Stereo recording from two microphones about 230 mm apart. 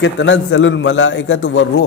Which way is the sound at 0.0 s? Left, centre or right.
Left.